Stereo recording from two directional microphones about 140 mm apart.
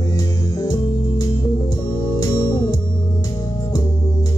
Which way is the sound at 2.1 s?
25° left (ahead or behind).